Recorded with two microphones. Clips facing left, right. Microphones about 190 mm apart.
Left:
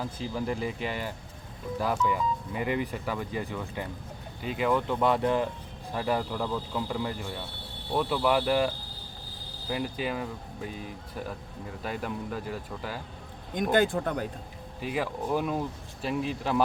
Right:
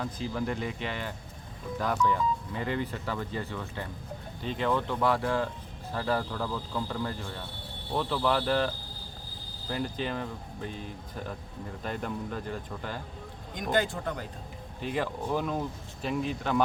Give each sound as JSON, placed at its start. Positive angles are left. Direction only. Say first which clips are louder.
{"t": 0.0, "sound": "speech", "louder": "even", "side_deg": 5}
{"t": 13.5, "sound": "speech", "louder": "left 4 dB", "side_deg": 50}
{"t": 14.8, "sound": "speech", "louder": "left 1 dB", "side_deg": 5}